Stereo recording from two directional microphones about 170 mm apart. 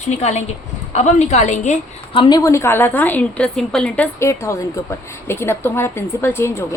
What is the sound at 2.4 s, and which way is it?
A woman's voice, 15° left (ahead or behind).